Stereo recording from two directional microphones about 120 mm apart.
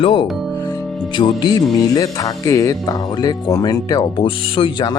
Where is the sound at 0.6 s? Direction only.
30° left (ahead or behind).